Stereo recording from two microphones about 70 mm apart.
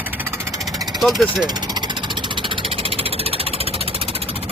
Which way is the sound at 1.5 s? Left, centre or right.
Right.